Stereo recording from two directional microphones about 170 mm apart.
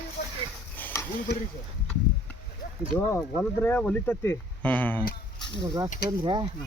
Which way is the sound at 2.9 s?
10° left (ahead or behind).